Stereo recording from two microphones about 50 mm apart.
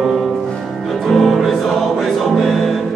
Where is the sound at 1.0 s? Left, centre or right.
Centre.